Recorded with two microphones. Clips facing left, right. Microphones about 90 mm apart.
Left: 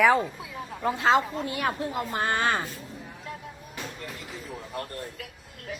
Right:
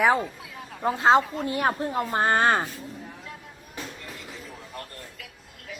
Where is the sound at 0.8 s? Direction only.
35° right (ahead or behind).